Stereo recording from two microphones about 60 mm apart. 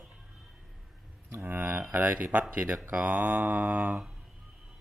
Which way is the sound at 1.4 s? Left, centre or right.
Right.